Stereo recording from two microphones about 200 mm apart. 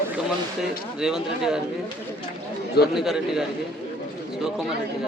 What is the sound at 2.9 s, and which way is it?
Speech, centre (ahead or behind).